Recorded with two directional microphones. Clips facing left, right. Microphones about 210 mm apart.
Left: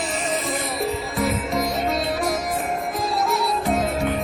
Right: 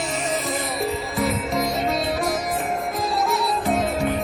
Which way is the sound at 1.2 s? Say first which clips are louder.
Even; centre (ahead or behind).